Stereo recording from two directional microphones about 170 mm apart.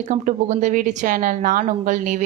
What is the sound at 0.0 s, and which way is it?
Speech, 45° right (ahead or behind).